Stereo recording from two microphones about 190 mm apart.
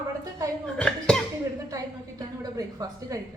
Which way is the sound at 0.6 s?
5° left (ahead or behind).